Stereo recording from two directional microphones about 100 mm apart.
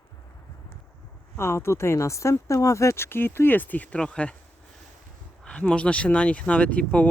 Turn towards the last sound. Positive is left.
turn(degrees=15)  # may be behind; listen again after turning